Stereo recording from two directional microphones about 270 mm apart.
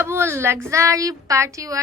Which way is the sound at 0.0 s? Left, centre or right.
Centre.